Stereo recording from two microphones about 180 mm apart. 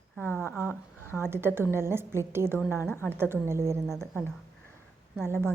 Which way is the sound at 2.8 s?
10° left (ahead or behind).